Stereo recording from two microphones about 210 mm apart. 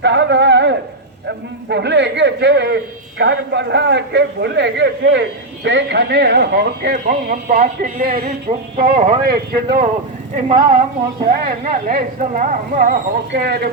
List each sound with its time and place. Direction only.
0.0 s a man's voice: 55° right (ahead or behind)
11.3 s speech: 40° right (ahead or behind)